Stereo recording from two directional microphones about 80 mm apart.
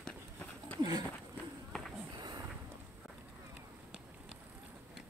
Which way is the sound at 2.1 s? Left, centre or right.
Right.